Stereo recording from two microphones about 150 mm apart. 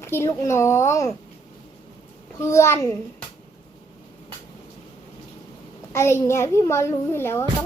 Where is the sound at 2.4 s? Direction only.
20° left (ahead or behind).